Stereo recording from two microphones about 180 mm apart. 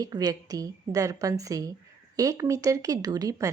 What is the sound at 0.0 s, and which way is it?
A woman's voice, 20° right (ahead or behind).